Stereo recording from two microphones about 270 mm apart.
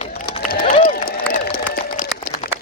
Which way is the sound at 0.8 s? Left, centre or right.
Left.